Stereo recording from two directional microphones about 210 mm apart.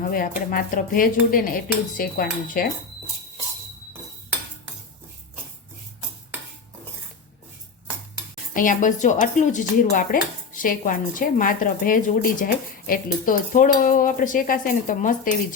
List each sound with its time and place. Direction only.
0.0 s speech: 45° left (ahead or behind)
8.5 s speech: 40° left (ahead or behind)